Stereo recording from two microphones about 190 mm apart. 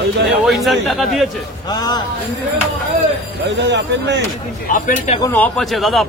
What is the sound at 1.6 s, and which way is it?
Speech, 20° left (ahead or behind).